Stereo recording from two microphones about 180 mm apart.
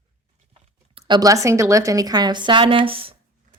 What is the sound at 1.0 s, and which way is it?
Speech, 20° right (ahead or behind).